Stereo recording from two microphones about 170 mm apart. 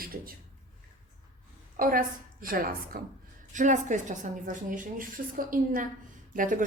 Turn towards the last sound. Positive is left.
turn(degrees=-50)  # may be behind; listen again after turning